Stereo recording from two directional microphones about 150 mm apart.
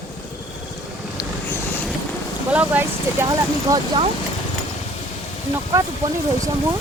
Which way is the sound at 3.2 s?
25° right (ahead or behind).